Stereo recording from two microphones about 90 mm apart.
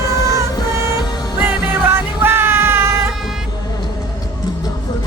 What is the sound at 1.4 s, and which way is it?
Music, 25° right (ahead or behind).